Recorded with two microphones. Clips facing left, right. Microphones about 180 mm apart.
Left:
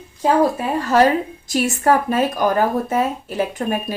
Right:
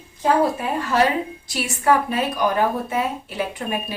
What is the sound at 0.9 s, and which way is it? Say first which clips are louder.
A woman's voice: left 5 dB; 45° left (ahead or behind).